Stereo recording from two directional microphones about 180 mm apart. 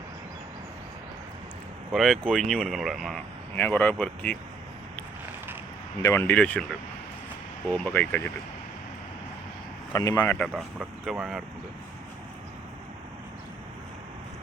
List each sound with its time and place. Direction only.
1.9 s speech: centre (ahead or behind)
6.0 s speech: 15° left (ahead or behind)
7.7 s speech: 10° left (ahead or behind)
9.9 s speech: 20° left (ahead or behind)
10.2 s speech: 5° left (ahead or behind)
10.5 s speech: 5° right (ahead or behind)